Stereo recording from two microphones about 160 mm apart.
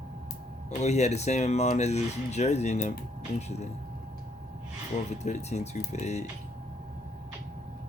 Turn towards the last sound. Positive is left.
turn(degrees=45)  # may be behind; listen again after turning